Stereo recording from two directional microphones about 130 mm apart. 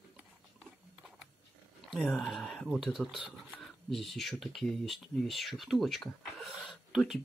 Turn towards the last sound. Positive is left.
turn(degrees=0)  # may be behind; listen again after turning